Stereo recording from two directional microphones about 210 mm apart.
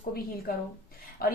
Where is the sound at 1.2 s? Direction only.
45° left (ahead or behind).